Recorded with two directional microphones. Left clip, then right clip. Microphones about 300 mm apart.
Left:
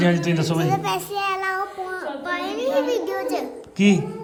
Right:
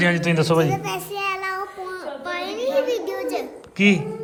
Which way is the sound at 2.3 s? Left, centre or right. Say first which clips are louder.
Even; centre.